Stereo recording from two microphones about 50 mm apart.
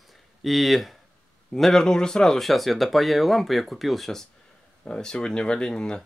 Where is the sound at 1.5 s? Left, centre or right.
Centre.